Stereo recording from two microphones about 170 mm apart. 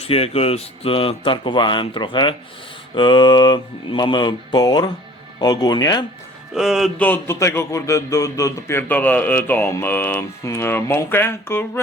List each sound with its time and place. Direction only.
0.1 s speech: 35° left (ahead or behind)
2.9 s mantra: 30° left (ahead or behind)
6.5 s speech: centre (ahead or behind)
7.0 s speech: 15° left (ahead or behind)